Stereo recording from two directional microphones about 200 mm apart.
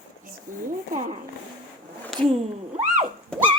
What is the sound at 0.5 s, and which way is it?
Speech, 40° right (ahead or behind).